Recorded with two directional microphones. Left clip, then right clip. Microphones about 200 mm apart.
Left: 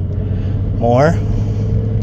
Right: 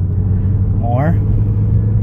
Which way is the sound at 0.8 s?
40° left (ahead or behind).